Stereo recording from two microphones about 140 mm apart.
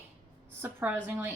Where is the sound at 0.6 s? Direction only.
15° right (ahead or behind).